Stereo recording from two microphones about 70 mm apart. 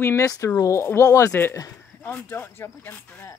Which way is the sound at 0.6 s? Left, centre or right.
Left.